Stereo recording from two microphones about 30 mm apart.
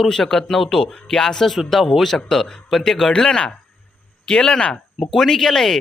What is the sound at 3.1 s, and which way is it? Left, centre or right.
Speech, left.